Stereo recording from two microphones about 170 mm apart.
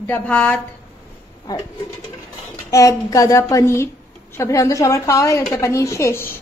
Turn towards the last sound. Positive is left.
turn(degrees=15)  # may be behind; listen again after turning